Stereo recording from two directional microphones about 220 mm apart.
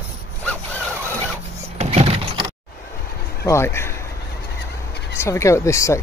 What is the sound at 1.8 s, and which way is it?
Power windows, 30° right (ahead or behind).